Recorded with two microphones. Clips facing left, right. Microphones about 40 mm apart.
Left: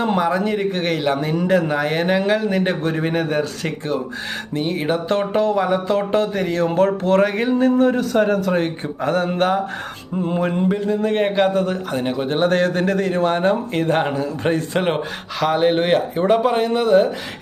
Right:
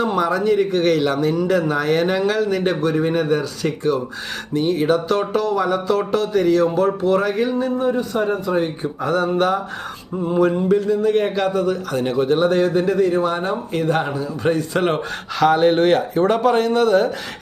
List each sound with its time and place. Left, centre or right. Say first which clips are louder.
0.2 s a man's voice: right 2 dB; left
1.8 s a man's voice: right 1 dB; centre; by 3.7 s left
4.8 s speech: even; left
6.7 s a sound: left 2 dB; left
7.6 s speech: left 4 dB; left
8.5 s a sound: even; left
9.0 s speech: even; left
12.0 s speech: right 5 dB; centre
12.3 s speech: right 1 dB; left
14.7 s speech: right 1 dB; centre